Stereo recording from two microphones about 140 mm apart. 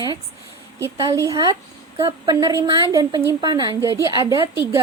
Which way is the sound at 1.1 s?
25° right (ahead or behind).